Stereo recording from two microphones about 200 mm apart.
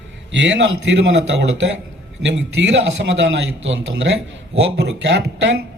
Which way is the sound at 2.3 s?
65° right (ahead or behind).